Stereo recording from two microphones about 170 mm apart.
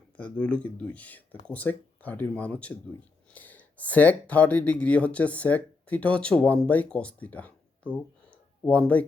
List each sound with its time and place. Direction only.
0.2 s speech: 5° left (ahead or behind)